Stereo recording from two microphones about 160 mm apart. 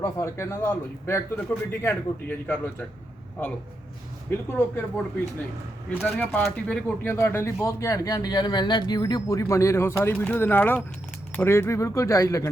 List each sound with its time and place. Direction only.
0.0 s a man's voice: 15° left (ahead or behind)
4.3 s a man's voice: 15° left (ahead or behind)
6.0 s a man's voice: 5° left (ahead or behind)